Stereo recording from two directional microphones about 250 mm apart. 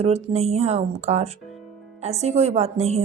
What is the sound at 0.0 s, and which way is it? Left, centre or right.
A woman's voice, right.